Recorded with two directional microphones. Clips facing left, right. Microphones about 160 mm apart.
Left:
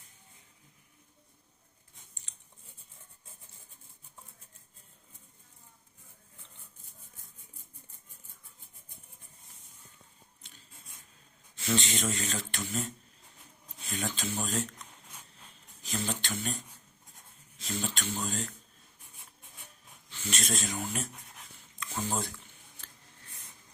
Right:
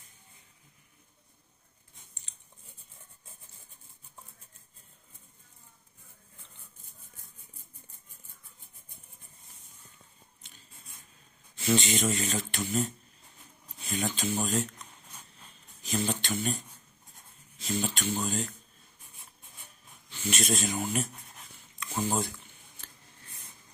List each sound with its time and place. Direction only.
11.6 s speech: 10° right (ahead or behind)
13.8 s speech: 5° right (ahead or behind)
15.8 s speech: 5° right (ahead or behind)
17.6 s speech: 5° right (ahead or behind)
20.1 s speech: 5° right (ahead or behind)
21.8 s a sound: 10° right (ahead or behind)